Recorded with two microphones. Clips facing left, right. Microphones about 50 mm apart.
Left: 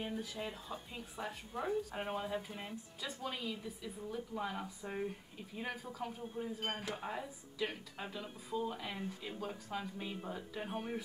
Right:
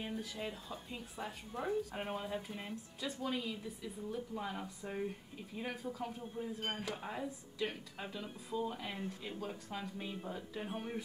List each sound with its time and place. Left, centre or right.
0.0 s speech: centre